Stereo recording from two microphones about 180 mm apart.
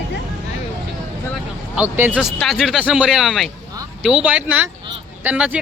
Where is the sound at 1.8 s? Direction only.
10° right (ahead or behind).